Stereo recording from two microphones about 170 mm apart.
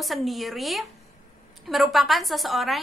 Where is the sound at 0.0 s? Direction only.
Centre (ahead or behind).